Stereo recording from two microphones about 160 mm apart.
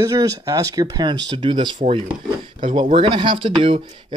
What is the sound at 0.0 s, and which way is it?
A man's voice, 20° right (ahead or behind).